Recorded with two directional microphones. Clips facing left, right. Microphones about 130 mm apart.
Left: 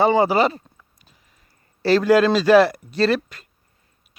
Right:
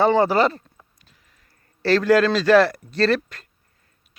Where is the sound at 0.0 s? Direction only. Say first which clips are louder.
Even; 5° left (ahead or behind).